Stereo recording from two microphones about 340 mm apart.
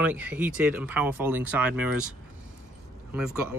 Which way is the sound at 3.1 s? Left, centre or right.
Centre.